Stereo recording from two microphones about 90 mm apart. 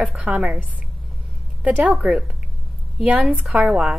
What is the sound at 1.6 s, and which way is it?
Speech, 15° right (ahead or behind).